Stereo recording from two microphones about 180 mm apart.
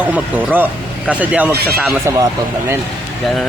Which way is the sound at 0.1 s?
10° right (ahead or behind).